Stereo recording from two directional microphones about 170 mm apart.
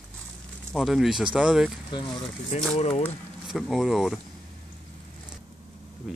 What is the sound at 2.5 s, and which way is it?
Speech, 40° left (ahead or behind).